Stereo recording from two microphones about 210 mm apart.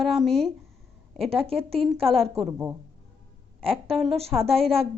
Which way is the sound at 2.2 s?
30° right (ahead or behind).